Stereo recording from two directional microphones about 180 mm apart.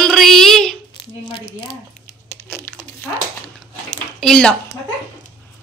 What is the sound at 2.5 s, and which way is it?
Crumpling, 10° left (ahead or behind).